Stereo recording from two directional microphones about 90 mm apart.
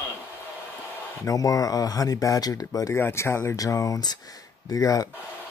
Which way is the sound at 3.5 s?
40° left (ahead or behind).